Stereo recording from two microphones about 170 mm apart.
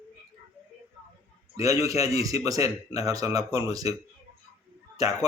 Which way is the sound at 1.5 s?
20° right (ahead or behind).